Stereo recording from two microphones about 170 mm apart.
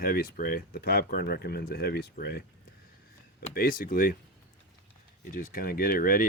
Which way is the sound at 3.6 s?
55° left (ahead or behind).